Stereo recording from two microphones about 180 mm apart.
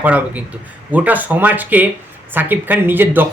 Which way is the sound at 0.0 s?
10° right (ahead or behind).